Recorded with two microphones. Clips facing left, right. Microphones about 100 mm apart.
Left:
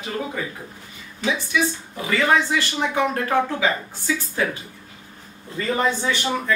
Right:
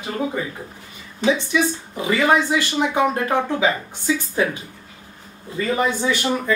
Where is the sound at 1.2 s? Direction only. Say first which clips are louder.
Right 4 dB; 20° right (ahead or behind).